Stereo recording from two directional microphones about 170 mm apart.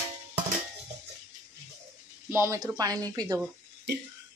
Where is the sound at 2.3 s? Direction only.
15° right (ahead or behind).